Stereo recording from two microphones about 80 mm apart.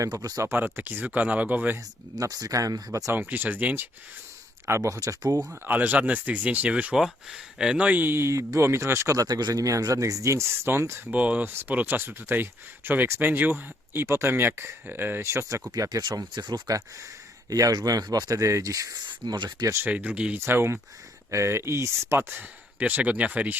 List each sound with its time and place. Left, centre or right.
0.0 s speech: right
0.4 s speech: right
2.1 s speech: right
3.1 s speech: right
4.6 s speech: right
5.6 s speech: right
11.1 s speech: centre; by 15.6 s right
15.7 s speech: right
17.5 s speech: right
19.0 s speech: right
19.8 s speech: centre
20.4 s speech: right
22.3 s speech: right